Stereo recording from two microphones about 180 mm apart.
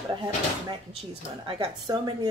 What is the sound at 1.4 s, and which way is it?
Speech, 30° right (ahead or behind).